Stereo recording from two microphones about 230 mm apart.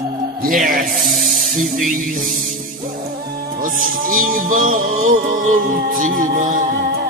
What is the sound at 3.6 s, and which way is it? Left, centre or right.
Music, right.